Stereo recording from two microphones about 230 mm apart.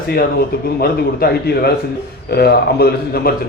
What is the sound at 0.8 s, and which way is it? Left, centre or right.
A man's voice, left.